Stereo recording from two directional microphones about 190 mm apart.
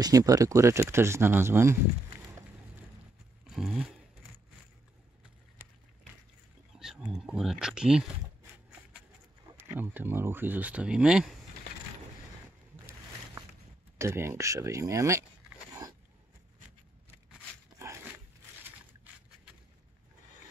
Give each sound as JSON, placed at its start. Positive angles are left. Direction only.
{"t": 0.0, "sound": "speech", "side_deg": -20}
{"t": 3.4, "sound": "a sound", "side_deg": 0}
{"t": 5.6, "sound": "a sound", "side_deg": -5}
{"t": 6.8, "sound": "speech", "side_deg": 0}
{"t": 9.6, "sound": "speech", "side_deg": -10}
{"t": 13.9, "sound": "speech", "side_deg": -15}